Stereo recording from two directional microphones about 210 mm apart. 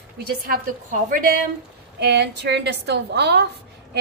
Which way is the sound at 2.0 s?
55° right (ahead or behind).